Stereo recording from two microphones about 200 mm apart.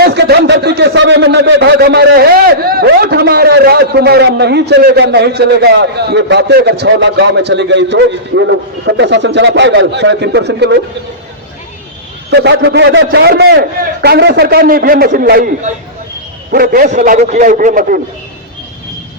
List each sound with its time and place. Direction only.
0.0 s speech: 55° right (ahead or behind)
12.3 s a man's voice: 60° right (ahead or behind)